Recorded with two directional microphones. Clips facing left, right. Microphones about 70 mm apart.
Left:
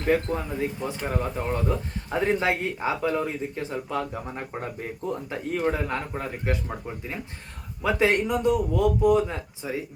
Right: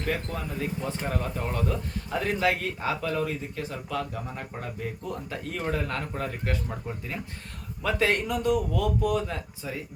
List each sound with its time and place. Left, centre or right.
0.0 s a man's voice: left
0.9 s a man's voice: centre; by 4.9 s left
5.5 s a man's voice: centre